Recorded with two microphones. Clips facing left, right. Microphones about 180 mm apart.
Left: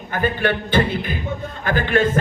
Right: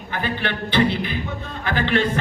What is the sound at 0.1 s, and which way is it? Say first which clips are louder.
Music: left 5 dB; 45° left (ahead or behind).